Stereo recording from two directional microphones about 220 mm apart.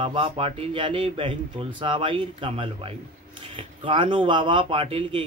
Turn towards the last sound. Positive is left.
turn(degrees=-25)  # may be behind; listen again after turning